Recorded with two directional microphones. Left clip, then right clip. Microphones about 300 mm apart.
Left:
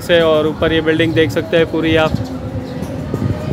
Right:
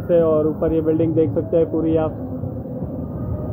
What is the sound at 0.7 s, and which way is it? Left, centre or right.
Speech, centre.